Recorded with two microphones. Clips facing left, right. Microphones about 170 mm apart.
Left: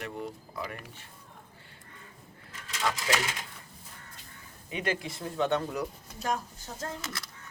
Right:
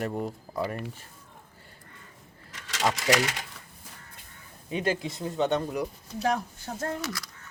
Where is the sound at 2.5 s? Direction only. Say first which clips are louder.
Right 4 dB; 85° right.